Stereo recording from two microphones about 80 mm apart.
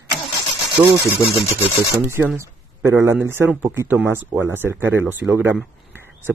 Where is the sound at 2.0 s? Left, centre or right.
Right.